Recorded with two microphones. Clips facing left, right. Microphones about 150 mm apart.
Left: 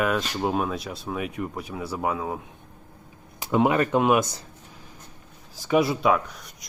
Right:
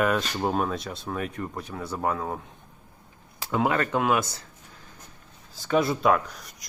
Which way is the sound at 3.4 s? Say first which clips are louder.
Left 4 dB; 20° left (ahead or behind).